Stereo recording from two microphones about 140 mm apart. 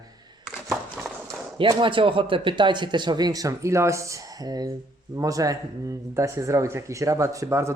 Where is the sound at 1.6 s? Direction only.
35° right (ahead or behind).